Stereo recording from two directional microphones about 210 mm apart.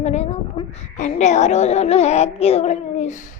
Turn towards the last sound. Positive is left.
turn(degrees=30)  # may be behind; listen again after turning